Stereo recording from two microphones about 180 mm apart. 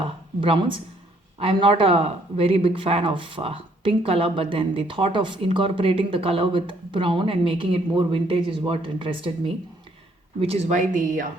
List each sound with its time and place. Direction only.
0.3 s a woman's voice: 30° right (ahead or behind); by 11.3 s 45° right (ahead or behind)